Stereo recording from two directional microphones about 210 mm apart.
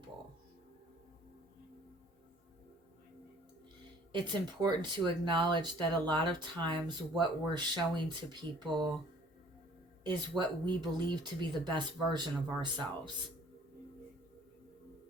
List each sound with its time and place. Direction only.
4.3 s speech: 20° right (ahead or behind)
10.0 s speech: 20° right (ahead or behind)